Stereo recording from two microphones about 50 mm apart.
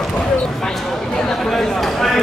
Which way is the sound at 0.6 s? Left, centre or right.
Centre.